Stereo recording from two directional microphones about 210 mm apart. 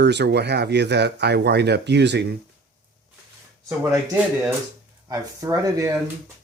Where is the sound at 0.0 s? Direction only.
55° right (ahead or behind).